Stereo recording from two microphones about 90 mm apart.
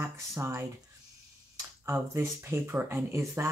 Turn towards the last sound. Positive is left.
turn(degrees=-30)  # may be behind; listen again after turning